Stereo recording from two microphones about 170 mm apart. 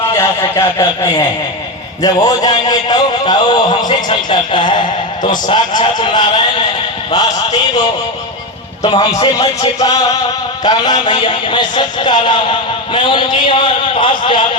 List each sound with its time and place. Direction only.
0.1 s a man's voice: 15° left (ahead or behind)
8.8 s a man's voice: 25° left (ahead or behind)